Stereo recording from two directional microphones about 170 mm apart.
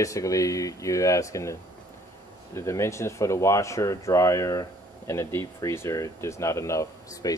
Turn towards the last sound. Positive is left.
turn(degrees=20)  # may be behind; listen again after turning